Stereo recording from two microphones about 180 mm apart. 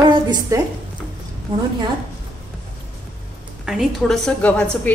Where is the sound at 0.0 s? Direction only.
25° right (ahead or behind).